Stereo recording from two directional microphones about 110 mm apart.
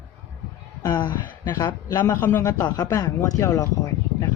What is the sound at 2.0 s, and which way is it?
Speech, 20° left (ahead or behind).